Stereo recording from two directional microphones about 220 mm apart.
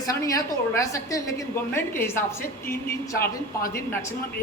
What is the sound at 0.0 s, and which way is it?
A woman's voice, 15° left (ahead or behind).